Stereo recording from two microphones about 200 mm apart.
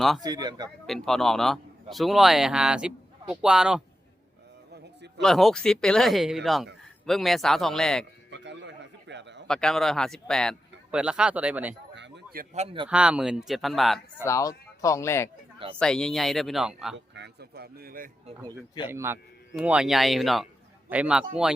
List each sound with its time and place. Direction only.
0.2 s speech: 20° right (ahead or behind)
0.9 s a man's voice: centre (ahead or behind)
5.2 s a man's voice: centre (ahead or behind)
8.3 s a sound: 60° right (ahead or behind)
9.5 s a man's voice: 5° left (ahead or behind)
11.9 s a sound: 60° right (ahead or behind)
12.5 s speech: 25° right (ahead or behind)
12.9 s a man's voice: 5° right (ahead or behind)
14.3 s a man's voice: 15° left (ahead or behind); by 17.0 s centre (ahead or behind)
17.2 s speech: 55° right (ahead or behind)
18.9 s a man's voice: 10° right (ahead or behind)